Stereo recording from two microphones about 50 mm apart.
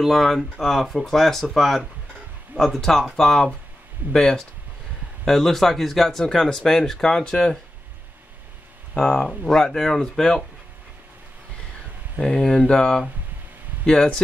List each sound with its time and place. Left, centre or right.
0.0 s speech: centre
8.9 s speech: centre
12.2 s speech: centre